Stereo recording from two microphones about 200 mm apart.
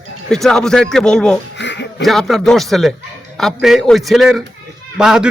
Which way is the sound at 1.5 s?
60° left (ahead or behind).